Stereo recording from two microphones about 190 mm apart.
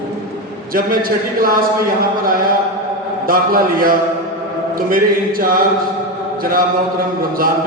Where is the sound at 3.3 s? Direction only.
50° right (ahead or behind).